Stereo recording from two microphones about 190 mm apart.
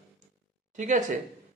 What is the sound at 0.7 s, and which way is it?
Speech, 40° right (ahead or behind).